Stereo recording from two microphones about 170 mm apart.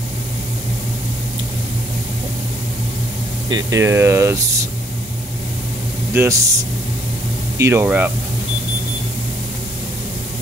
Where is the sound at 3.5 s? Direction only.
20° right (ahead or behind).